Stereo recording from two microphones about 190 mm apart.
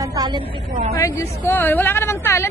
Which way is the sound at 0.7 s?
45° right (ahead or behind).